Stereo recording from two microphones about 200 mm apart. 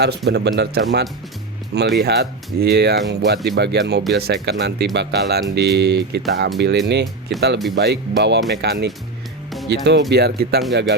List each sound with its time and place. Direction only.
0.3 s speech: 55° right (ahead or behind)